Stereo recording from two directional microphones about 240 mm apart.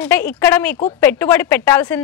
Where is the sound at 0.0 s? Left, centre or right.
Centre.